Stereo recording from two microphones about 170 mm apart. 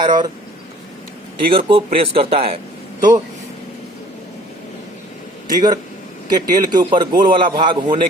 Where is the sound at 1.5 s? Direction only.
30° right (ahead or behind).